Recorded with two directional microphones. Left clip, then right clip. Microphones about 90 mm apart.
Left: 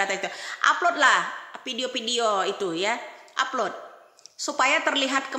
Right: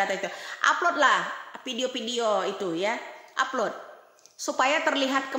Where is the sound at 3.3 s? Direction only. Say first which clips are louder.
Left 1 dB; 45° right (ahead or behind).